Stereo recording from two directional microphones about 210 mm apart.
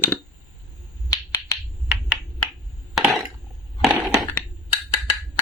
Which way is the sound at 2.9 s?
5° right (ahead or behind).